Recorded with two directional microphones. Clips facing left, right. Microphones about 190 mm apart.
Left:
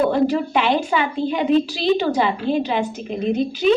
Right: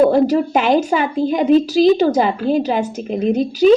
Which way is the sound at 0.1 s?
40° right (ahead or behind).